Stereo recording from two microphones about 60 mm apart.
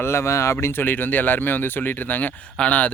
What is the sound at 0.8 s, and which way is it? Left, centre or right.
Speech, left.